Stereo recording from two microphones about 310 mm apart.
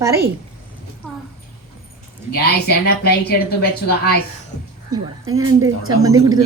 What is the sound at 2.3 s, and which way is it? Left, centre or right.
A woman's voice, left.